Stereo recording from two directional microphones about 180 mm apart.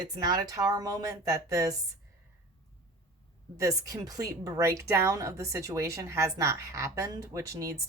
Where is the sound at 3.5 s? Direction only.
20° right (ahead or behind).